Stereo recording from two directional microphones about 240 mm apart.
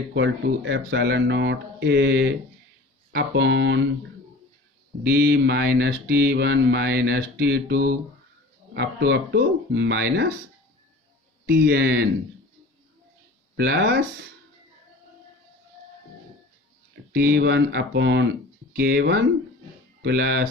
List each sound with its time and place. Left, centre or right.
0.1 s speech: right
5.0 s speech: right
11.4 s speech: right
13.6 s speech: right
17.2 s speech: right